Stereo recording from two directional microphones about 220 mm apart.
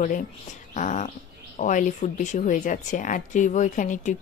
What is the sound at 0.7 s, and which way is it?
Dog, 35° left (ahead or behind).